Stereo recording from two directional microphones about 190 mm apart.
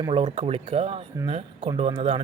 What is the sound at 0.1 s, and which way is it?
Speech, 30° right (ahead or behind).